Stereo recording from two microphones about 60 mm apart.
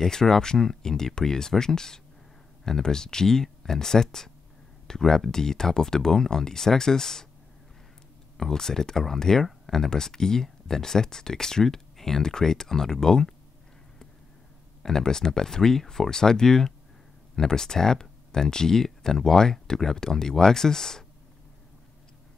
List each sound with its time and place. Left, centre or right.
0.0 s speech: centre
8.4 s speech: centre
14.8 s speech: centre